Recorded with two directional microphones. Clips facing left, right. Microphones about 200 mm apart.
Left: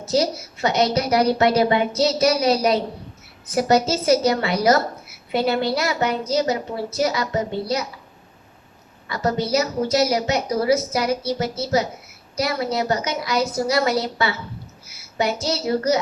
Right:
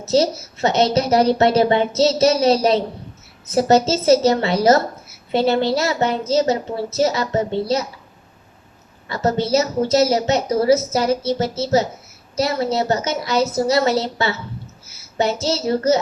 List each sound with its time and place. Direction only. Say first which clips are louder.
0.1 s a woman's voice: right 4 dB; 25° right (ahead or behind)
9.0 s a woman's voice: right 3 dB; 25° right (ahead or behind)